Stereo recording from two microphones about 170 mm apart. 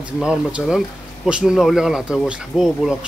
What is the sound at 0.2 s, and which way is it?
Speech, 5° right (ahead or behind).